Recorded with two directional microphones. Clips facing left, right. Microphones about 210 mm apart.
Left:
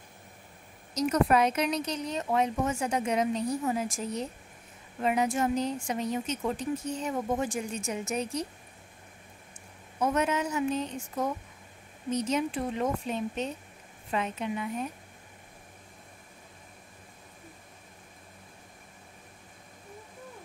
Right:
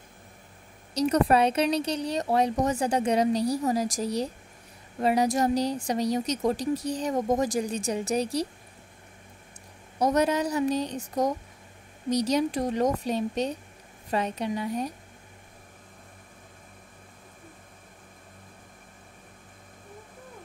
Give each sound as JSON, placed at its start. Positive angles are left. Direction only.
{"t": 0.9, "sound": "a woman's voice", "side_deg": -35}
{"t": 9.9, "sound": "a woman's voice", "side_deg": -40}